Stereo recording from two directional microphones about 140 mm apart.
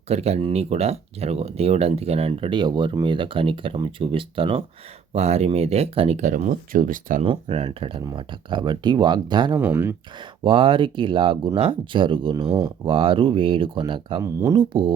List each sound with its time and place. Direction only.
0.1 s speech: 50° right (ahead or behind); by 7.2 s 70° right (ahead or behind)
7.2 s speech: 40° right (ahead or behind)
9.6 s speech: 15° right (ahead or behind)
10.4 s speech: 40° right (ahead or behind)
14.3 s speech: 20° right (ahead or behind)
14.7 s speech: 35° right (ahead or behind)